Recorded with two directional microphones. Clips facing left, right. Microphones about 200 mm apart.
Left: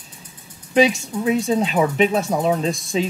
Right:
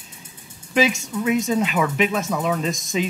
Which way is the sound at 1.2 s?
35° left (ahead or behind).